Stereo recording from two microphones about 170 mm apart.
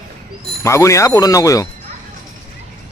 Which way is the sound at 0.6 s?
15° left (ahead or behind).